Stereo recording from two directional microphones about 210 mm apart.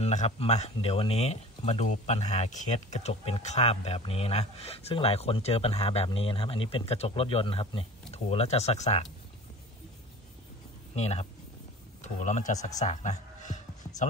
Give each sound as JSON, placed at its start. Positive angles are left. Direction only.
{"t": 0.0, "sound": "speech", "side_deg": 35}
{"t": 11.0, "sound": "a man's voice", "side_deg": 30}
{"t": 12.6, "sound": "music", "side_deg": 35}